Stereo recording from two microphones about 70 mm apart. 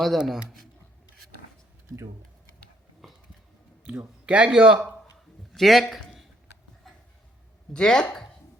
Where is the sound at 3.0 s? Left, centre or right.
Centre.